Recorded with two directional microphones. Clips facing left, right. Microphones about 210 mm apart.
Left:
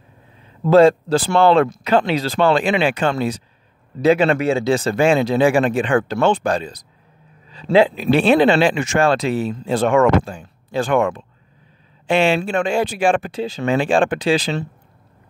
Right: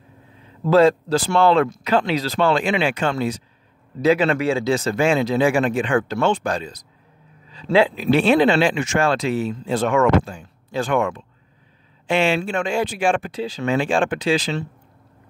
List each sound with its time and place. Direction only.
0.8 s speech: 30° left (ahead or behind)
12.1 s speech: 35° left (ahead or behind)